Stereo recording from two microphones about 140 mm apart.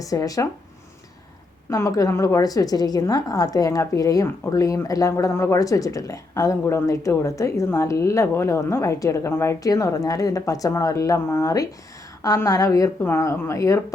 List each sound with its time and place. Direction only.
0.0 s a woman's voice: 25° left (ahead or behind)
1.7 s a woman's voice: 20° left (ahead or behind)